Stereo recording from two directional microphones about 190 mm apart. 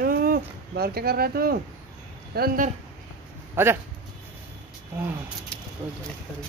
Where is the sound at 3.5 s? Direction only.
10° right (ahead or behind).